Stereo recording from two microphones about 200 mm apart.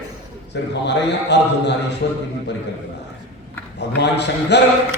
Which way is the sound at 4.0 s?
60° left (ahead or behind).